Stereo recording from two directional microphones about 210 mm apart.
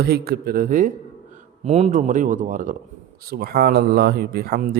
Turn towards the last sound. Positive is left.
turn(degrees=-45)  # may be behind; listen again after turning